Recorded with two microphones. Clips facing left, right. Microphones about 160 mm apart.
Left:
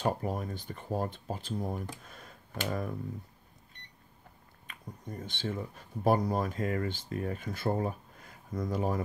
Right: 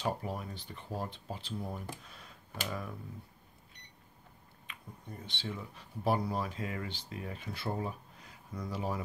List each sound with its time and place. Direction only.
0.0 s speech: 45° left (ahead or behind)
2.0 s a sound: 45° left (ahead or behind)
4.6 s speech: 45° left (ahead or behind)